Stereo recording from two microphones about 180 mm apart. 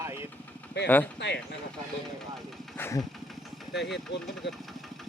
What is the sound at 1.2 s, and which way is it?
Speech, 75° left (ahead or behind).